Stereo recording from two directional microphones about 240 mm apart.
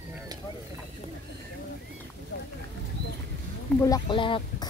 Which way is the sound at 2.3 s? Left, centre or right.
Left.